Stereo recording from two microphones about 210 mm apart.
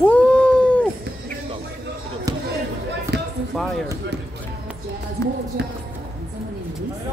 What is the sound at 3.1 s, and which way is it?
Basketball bounce, 50° right (ahead or behind).